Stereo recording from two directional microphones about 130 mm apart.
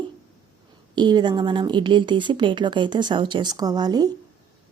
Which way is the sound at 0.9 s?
35° right (ahead or behind).